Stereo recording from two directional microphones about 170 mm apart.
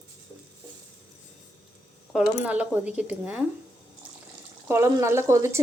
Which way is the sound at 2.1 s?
5° right (ahead or behind).